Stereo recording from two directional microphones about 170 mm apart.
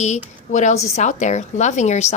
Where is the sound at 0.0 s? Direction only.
45° left (ahead or behind).